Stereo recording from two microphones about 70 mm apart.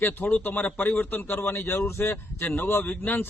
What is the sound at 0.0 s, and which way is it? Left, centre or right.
A man's voice, left.